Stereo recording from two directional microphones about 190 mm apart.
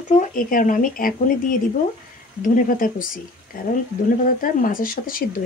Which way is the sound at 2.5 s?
45° left (ahead or behind).